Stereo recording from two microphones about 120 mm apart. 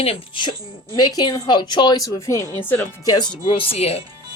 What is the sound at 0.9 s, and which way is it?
A woman's voice, 35° left (ahead or behind).